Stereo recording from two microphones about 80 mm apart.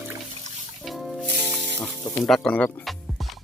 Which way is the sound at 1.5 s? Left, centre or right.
Centre.